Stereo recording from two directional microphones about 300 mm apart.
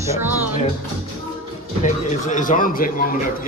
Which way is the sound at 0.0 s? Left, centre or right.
Centre.